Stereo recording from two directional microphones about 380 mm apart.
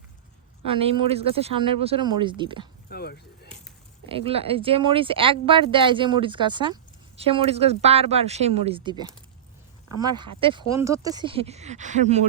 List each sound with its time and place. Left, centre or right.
0.6 s speech: centre
2.9 s a sound: left
4.1 s speech: centre